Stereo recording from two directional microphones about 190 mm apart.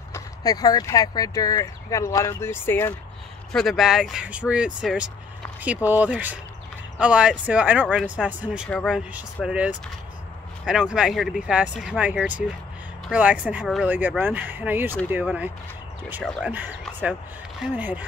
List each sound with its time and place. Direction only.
0.1 s speech: 20° left (ahead or behind)
3.5 s speech: centre (ahead or behind)